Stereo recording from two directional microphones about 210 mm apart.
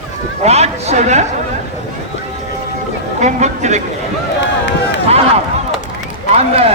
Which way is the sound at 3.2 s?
35° right (ahead or behind).